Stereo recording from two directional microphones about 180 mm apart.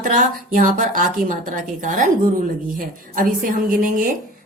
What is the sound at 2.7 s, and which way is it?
A woman's voice, 50° right (ahead or behind).